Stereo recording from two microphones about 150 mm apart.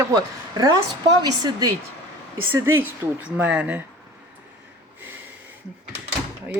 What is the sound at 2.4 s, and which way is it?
A woman's voice, 15° right (ahead or behind).